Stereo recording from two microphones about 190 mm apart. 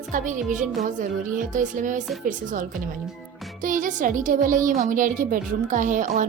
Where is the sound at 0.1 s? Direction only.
40° right (ahead or behind).